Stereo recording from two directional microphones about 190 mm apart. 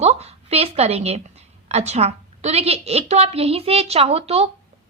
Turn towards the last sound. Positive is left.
turn(degrees=-35)  # may be behind; listen again after turning